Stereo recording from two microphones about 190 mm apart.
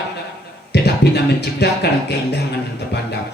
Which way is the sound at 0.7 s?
60° left (ahead or behind).